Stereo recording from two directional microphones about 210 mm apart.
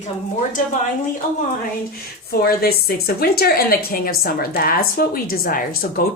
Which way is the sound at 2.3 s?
45° left (ahead or behind).